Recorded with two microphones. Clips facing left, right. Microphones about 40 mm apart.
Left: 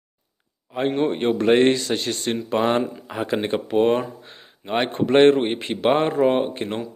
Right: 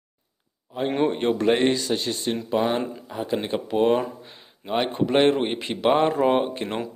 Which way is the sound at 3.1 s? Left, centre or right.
Left.